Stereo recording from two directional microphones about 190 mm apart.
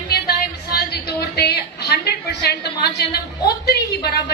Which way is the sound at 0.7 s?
55° left (ahead or behind).